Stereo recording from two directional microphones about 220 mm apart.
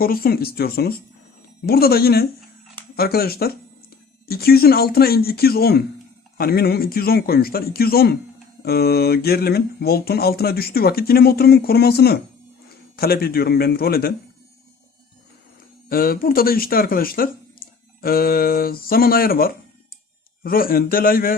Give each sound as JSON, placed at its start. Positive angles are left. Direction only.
{"t": 0.0, "sound": "speech", "side_deg": 40}
{"t": 15.9, "sound": "speech", "side_deg": 40}